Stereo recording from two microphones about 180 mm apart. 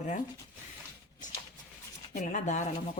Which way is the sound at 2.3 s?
40° left (ahead or behind).